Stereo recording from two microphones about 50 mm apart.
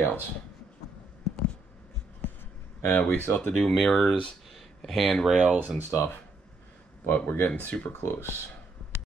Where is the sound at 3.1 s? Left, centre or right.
Left.